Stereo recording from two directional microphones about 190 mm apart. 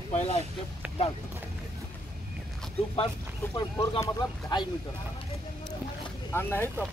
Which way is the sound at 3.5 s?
20° left (ahead or behind).